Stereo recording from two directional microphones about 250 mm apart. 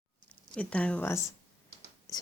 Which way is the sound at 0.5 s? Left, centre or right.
Centre.